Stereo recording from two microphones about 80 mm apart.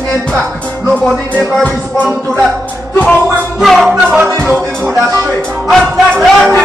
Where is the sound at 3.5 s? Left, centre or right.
Centre.